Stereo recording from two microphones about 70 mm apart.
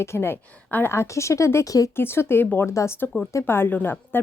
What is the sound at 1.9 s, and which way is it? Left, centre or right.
Speech, left.